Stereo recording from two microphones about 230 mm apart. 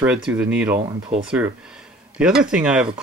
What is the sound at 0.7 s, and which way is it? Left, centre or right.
Speech, right.